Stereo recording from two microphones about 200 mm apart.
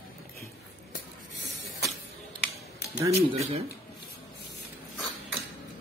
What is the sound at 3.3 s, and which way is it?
Speech, 25° right (ahead or behind).